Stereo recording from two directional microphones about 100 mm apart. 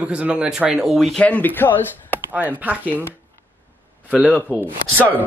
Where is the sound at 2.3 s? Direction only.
15° right (ahead or behind).